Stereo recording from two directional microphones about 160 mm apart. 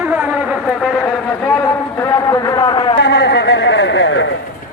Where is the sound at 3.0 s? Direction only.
90° left.